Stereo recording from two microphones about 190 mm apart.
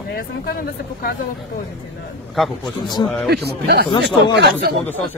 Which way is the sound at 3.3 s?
60° right (ahead or behind).